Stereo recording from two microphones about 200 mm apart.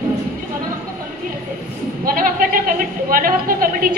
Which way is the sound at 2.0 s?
45° right (ahead or behind).